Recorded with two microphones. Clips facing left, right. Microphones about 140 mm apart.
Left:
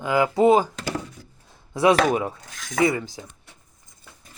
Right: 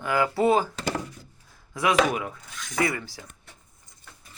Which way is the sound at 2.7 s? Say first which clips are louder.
Left 5 dB; 20° left (ahead or behind).